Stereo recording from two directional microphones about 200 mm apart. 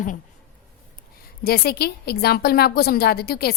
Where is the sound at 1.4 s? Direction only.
50° left (ahead or behind).